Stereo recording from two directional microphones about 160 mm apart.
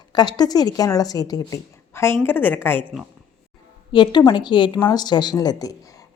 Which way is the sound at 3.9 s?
30° left (ahead or behind).